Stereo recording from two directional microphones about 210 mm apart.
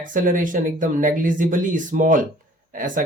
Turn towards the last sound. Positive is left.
turn(degrees=-40)  # may be behind; listen again after turning